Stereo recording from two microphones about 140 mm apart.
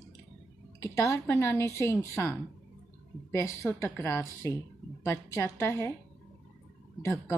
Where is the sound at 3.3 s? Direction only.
20° left (ahead or behind).